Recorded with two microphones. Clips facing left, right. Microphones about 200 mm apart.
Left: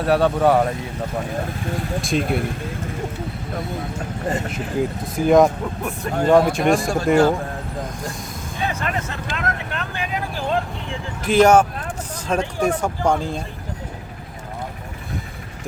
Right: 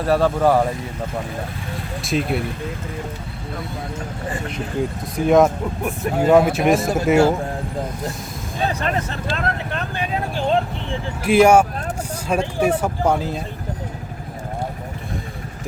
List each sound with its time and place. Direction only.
0.0 s speech: centre (ahead or behind)
2.0 s speech: centre (ahead or behind)
4.4 s speech: 5° left (ahead or behind)
8.6 s speech: 35° right (ahead or behind)
9.3 s vehicle: 30° right (ahead or behind)
11.2 s speech: 10° right (ahead or behind)